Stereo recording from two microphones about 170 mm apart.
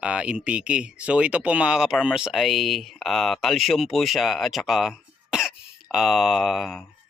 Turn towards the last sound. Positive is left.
turn(degrees=0)  # may be behind; listen again after turning